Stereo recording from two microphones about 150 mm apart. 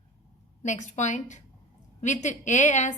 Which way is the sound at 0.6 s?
50° left (ahead or behind).